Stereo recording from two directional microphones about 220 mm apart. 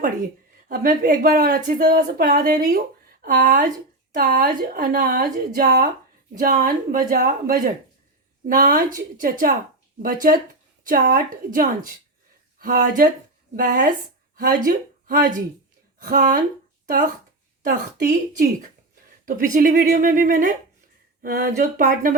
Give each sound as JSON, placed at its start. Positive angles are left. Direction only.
{"t": 0.7, "sound": "speech", "side_deg": -40}
{"t": 10.8, "sound": "speech", "side_deg": -40}
{"t": 17.7, "sound": "speech", "side_deg": -40}